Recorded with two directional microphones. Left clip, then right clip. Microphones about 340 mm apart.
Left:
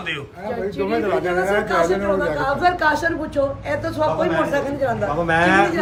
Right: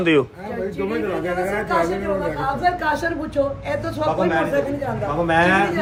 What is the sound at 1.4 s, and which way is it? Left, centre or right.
Speech, left.